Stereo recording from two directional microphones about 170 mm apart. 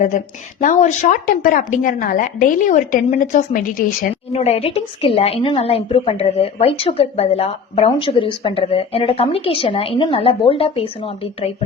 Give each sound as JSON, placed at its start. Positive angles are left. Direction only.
{"t": 0.6, "sound": "a woman's voice", "side_deg": 50}
{"t": 4.3, "sound": "speech", "side_deg": 35}